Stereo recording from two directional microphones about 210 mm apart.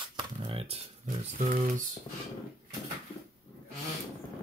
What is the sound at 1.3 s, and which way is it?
Speech, 35° right (ahead or behind).